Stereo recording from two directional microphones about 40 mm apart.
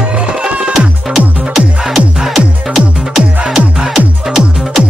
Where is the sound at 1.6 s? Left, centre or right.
Centre.